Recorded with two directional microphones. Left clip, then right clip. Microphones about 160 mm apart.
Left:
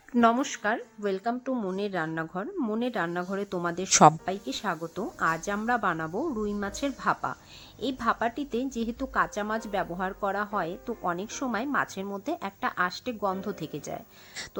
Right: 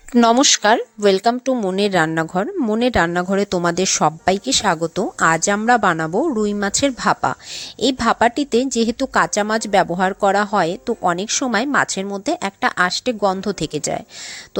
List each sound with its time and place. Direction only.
0.3 s speech: 45° right (ahead or behind)